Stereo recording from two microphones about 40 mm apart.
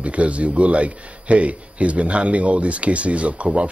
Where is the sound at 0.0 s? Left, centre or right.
Right.